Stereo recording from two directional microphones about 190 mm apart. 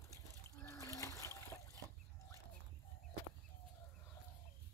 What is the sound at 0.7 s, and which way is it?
Trickle, 15° left (ahead or behind).